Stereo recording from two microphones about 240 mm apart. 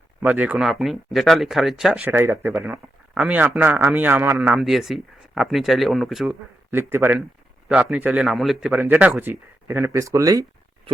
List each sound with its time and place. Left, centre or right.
0.2 s a man's voice: centre